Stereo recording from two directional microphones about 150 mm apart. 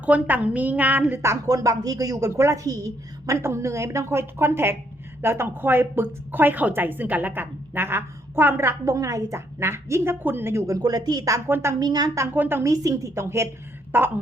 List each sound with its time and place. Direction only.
0.0 s a woman's voice: 10° right (ahead or behind)